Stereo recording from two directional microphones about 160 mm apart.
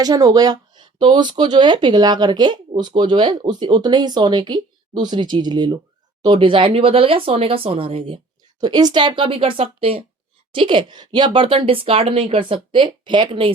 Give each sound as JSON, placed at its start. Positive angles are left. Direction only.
{"t": 0.0, "sound": "speech", "side_deg": -25}